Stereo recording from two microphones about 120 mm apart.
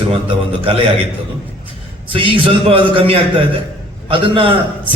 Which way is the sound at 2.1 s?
45° right (ahead or behind).